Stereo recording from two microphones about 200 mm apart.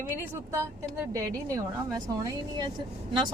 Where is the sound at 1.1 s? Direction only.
15° right (ahead or behind).